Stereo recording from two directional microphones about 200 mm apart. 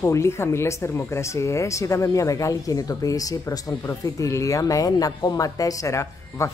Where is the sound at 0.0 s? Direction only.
15° left (ahead or behind).